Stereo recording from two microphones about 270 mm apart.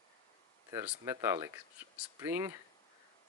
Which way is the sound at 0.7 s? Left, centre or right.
Centre.